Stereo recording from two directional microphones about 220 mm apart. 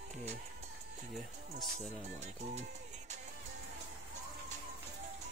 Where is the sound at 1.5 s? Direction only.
30° right (ahead or behind).